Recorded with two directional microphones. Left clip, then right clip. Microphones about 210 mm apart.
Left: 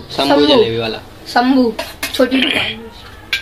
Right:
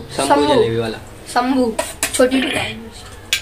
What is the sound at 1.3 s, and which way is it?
Speech, 35° left (ahead or behind).